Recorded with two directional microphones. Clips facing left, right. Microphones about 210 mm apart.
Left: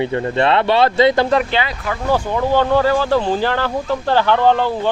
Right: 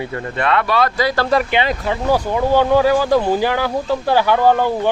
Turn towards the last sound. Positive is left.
turn(degrees=-15)  # may be behind; listen again after turning